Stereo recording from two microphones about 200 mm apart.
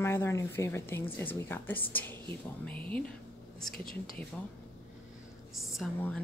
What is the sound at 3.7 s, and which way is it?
Speech, 45° left (ahead or behind).